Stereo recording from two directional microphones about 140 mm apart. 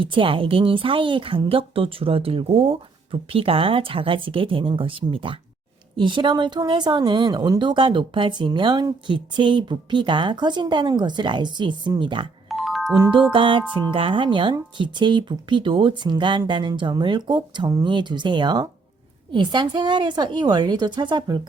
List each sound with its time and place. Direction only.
0.0 s a woman's voice: 35° right (ahead or behind)
12.5 s music: centre (ahead or behind)
13.3 s a woman's voice: 35° right (ahead or behind)